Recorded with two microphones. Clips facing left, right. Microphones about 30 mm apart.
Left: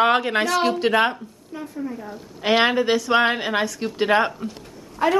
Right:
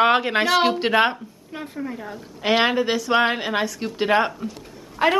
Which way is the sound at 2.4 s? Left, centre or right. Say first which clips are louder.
Left 1 dB; centre.